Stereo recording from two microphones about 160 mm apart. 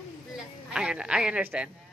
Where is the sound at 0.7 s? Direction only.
5° right (ahead or behind).